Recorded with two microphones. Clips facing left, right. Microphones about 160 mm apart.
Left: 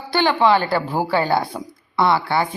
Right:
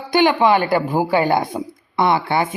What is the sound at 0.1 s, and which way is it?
A woman's voice, 15° right (ahead or behind).